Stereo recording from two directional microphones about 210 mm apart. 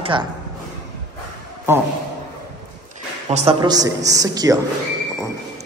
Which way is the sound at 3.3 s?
30° right (ahead or behind).